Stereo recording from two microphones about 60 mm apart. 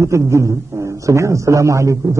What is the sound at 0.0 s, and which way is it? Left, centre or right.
A man's voice, right.